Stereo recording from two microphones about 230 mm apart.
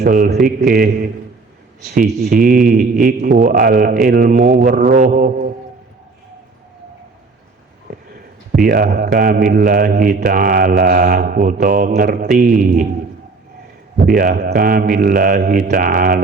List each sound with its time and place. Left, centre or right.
0.0 s a man's voice: right
2.3 s a man's voice: right
8.6 s a man's voice: right
14.0 s a man's voice: right